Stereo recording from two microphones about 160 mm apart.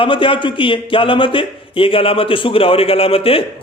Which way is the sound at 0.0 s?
35° left (ahead or behind).